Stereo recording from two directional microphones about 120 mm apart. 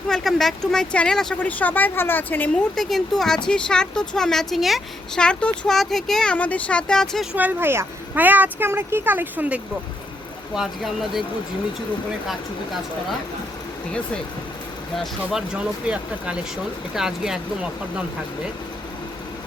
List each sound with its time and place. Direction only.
0.1 s speech: centre (ahead or behind)
2.7 s speech: centre (ahead or behind)
7.3 s speech: 15° right (ahead or behind)
10.5 s speech: 5° right (ahead or behind)
14.9 s speech: 5° right (ahead or behind)